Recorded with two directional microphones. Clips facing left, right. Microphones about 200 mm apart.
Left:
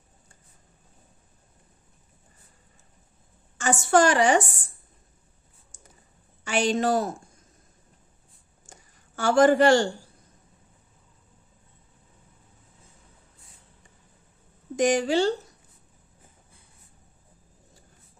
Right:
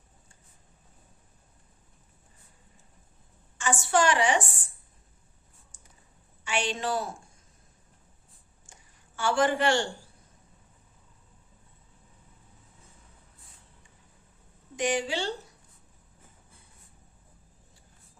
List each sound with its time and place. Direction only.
3.6 s a woman's voice: 45° left (ahead or behind)
6.4 s a woman's voice: 40° left (ahead or behind)
8.6 s a sound: 40° left (ahead or behind)
14.8 s a woman's voice: 45° left (ahead or behind)